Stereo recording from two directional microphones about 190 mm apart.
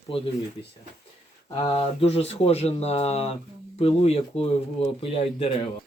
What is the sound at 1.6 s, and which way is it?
Speech, 30° left (ahead or behind).